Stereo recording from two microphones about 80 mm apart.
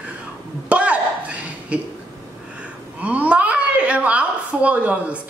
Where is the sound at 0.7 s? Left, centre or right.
Centre.